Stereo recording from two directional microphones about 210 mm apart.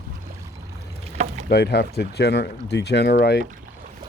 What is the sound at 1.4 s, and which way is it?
Speech, 50° left (ahead or behind).